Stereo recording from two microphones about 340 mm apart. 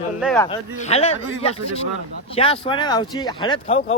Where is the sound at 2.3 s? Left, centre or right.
Centre.